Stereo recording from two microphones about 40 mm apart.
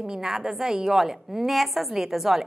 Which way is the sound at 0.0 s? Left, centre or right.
Centre.